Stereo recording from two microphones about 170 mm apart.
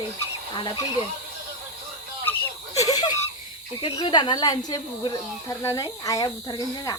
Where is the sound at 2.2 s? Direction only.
15° left (ahead or behind).